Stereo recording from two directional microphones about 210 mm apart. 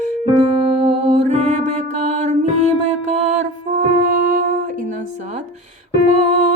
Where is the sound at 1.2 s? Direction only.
35° right (ahead or behind).